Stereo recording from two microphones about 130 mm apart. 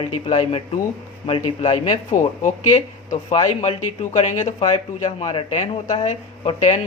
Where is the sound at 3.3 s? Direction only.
60° left (ahead or behind).